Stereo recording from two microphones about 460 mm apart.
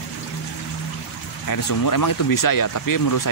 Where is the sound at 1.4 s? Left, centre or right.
Left.